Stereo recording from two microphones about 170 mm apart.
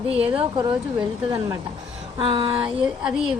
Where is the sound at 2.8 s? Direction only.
5° right (ahead or behind).